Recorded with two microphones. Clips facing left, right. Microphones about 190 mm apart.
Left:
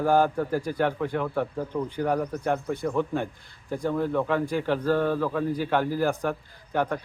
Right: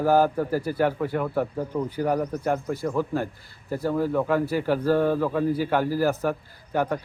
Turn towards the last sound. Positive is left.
turn(degrees=-10)  # may be behind; listen again after turning